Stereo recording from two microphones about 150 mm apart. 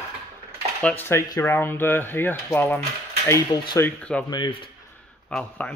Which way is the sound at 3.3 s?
30° left (ahead or behind).